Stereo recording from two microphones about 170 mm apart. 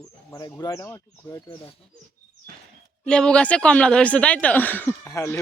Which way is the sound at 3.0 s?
5° left (ahead or behind).